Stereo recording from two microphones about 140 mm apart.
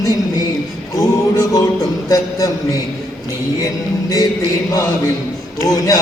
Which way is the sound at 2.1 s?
25° left (ahead or behind).